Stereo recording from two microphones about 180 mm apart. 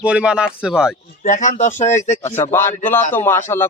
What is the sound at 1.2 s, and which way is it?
Speech, 45° left (ahead or behind).